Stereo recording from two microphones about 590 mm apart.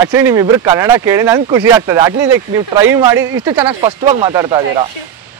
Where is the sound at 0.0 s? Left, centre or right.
Centre.